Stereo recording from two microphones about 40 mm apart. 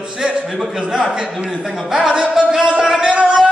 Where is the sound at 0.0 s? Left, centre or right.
Centre.